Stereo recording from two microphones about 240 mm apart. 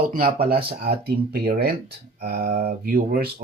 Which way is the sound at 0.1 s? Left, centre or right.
Right.